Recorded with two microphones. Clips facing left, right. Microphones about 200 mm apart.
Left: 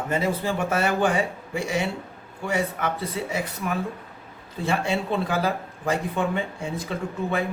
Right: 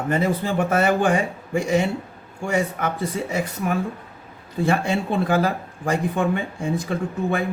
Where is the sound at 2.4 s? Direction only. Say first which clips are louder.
Right 3 dB; 50° right (ahead or behind).